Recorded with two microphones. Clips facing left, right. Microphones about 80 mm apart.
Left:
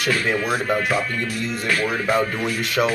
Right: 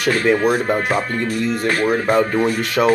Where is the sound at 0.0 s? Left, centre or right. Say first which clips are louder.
Right 6 dB; right.